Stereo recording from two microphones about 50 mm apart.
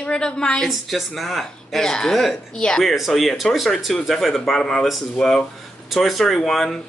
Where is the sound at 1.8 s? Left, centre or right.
Centre.